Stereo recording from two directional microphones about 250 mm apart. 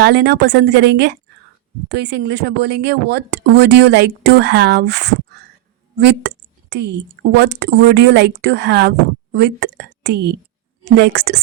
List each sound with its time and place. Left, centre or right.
0.0 s a woman's voice: right